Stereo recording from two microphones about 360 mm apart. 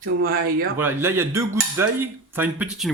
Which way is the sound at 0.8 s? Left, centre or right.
Centre.